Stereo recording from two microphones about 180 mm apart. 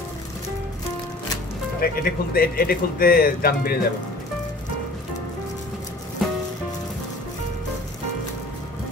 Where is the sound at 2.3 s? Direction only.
55° left (ahead or behind).